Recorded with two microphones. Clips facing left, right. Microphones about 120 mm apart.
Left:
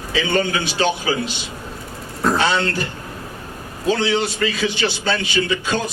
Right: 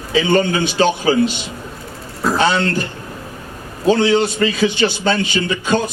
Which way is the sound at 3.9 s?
25° right (ahead or behind).